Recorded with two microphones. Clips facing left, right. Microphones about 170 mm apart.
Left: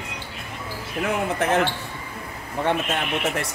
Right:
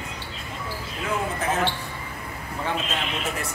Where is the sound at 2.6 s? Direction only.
60° left (ahead or behind).